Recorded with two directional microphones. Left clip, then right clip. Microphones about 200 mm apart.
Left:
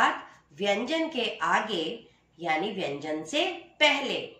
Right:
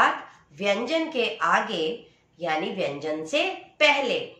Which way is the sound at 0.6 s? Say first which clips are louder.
Right 3 dB; 15° right (ahead or behind).